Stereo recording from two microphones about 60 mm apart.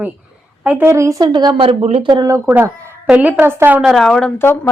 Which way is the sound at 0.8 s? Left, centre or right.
Right.